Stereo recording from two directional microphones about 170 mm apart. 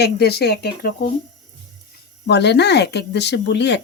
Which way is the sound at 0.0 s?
70° left (ahead or behind).